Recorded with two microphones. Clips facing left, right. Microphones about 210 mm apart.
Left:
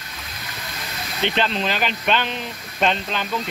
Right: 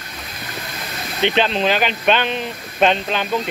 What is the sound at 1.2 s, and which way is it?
Speech, 20° right (ahead or behind).